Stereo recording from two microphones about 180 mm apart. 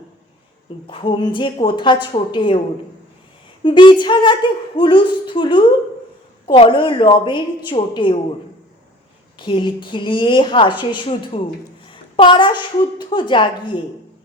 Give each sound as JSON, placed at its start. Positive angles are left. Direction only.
{"t": 0.9, "sound": "a woman's voice", "side_deg": 30}
{"t": 3.6, "sound": "a woman's voice", "side_deg": 25}
{"t": 9.4, "sound": "a woman's voice", "side_deg": 25}